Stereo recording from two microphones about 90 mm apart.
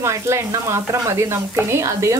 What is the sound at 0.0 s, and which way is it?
Speech, 35° right (ahead or behind).